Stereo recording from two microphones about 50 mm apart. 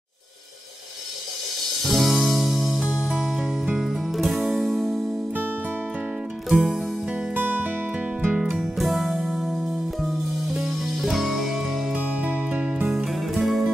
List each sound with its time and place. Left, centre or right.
1.9 s music: centre
6.5 s music: centre
7.3 s music: right
8.7 s music: centre
11.9 s music: right
12.9 s music: centre